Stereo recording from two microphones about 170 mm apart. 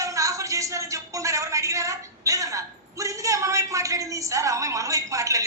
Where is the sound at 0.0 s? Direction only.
20° right (ahead or behind).